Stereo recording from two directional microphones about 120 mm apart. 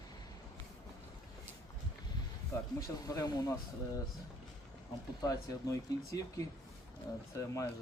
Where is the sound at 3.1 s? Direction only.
30° left (ahead or behind).